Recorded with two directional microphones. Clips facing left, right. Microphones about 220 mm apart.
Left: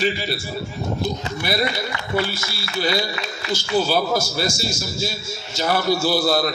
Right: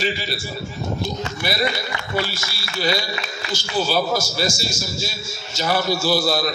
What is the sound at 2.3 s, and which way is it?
A man's voice, 55° left (ahead or behind).